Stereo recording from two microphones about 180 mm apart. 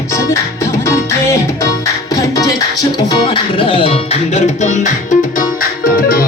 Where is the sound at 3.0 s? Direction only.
25° left (ahead or behind).